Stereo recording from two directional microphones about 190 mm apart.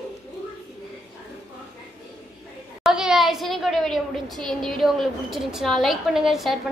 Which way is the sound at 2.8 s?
5° right (ahead or behind).